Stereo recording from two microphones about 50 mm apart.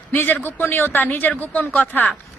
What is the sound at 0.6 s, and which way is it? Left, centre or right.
Speech, left.